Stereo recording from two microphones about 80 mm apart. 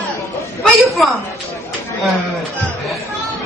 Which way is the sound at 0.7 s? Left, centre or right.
Centre.